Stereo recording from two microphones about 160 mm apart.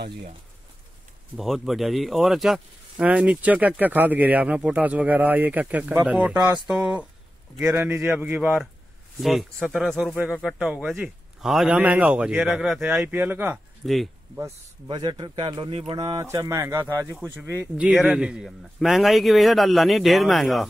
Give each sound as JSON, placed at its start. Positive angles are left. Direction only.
{"t": 1.3, "sound": "speech", "side_deg": 0}
{"t": 13.8, "sound": "speech", "side_deg": 0}
{"t": 14.9, "sound": "a man's voice", "side_deg": -30}
{"t": 16.3, "sound": "speech", "side_deg": -15}